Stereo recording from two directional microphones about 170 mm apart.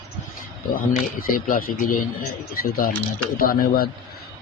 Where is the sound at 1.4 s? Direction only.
55° left (ahead or behind).